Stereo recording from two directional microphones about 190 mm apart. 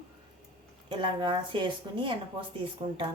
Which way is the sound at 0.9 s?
25° right (ahead or behind).